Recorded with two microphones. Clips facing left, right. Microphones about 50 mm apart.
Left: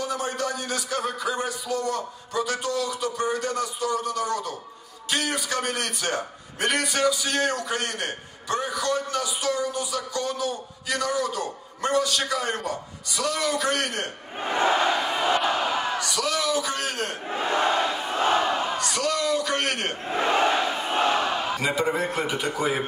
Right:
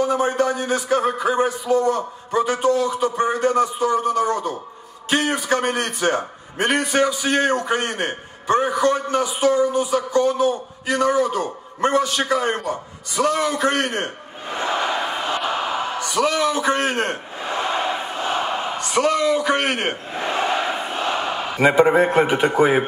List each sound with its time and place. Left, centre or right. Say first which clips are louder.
0.0 s a man's voice: right 9 dB; right
14.5 s crowd: left 2 dB; left
14.8 s crowd: right 1 dB; right
15.3 s crowd: right 1 dB; centre
15.9 s a man's voice: right 6 dB; right
17.7 s a sound: right 2 dB; right
18.6 s a man's voice: right 5 dB; right
21.2 s a sound: right 1 dB; centre
21.5 s a man's voice: right 15 dB; right